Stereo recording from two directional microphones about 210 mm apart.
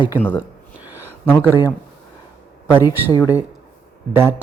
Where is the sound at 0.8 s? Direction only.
10° right (ahead or behind).